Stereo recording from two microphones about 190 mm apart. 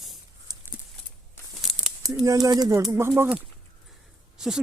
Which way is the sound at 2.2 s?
20° right (ahead or behind).